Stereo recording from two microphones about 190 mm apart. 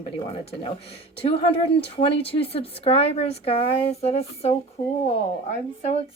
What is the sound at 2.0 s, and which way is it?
Speech, 30° left (ahead or behind).